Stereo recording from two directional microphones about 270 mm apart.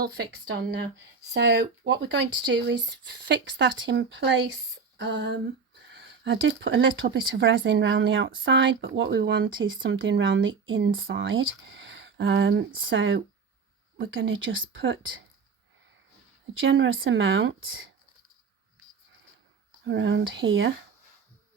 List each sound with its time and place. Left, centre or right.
0.0 s speech: right
16.6 s speech: right
19.8 s speech: right